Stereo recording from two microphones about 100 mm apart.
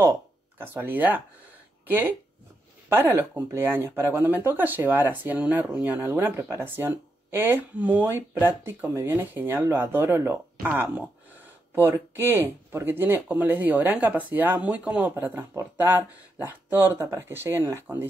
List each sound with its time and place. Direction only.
0.6 s speech: 20° right (ahead or behind)
11.7 s speech: 20° right (ahead or behind)